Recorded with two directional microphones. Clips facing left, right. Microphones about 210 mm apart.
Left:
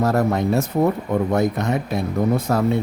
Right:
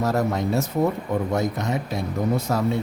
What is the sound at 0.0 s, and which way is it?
Speech, 55° left (ahead or behind).